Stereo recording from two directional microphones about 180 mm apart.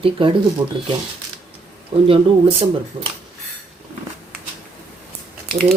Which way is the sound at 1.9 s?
25° right (ahead or behind).